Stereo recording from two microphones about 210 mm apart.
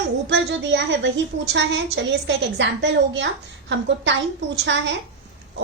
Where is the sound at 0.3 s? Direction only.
60° right (ahead or behind).